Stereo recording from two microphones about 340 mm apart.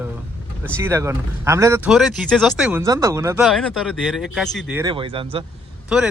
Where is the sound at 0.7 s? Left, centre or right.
Centre.